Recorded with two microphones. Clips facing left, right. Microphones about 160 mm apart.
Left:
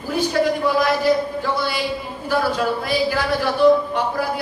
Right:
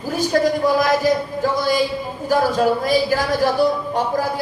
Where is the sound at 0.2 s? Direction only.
40° right (ahead or behind).